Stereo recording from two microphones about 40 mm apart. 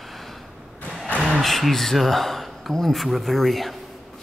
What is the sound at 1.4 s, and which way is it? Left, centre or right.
Speech, centre.